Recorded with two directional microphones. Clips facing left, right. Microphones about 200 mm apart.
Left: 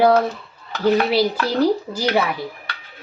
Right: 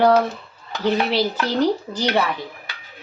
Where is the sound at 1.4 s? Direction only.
10° left (ahead or behind).